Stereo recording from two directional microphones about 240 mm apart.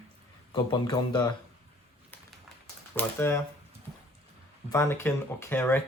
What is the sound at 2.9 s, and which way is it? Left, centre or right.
Speech, centre.